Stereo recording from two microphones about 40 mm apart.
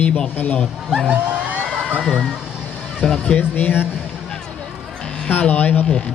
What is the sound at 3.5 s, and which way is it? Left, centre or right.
Speech, left.